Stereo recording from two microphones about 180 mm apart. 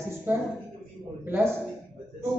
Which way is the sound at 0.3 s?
10° right (ahead or behind).